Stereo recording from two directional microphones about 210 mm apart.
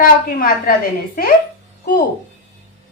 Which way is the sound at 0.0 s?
45° left (ahead or behind).